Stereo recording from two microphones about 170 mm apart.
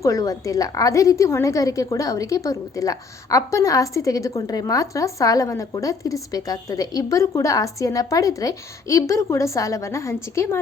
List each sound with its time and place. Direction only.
0.0 s a woman's voice: 20° left (ahead or behind)